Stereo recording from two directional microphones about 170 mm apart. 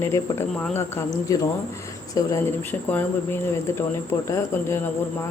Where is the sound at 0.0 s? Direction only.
15° left (ahead or behind).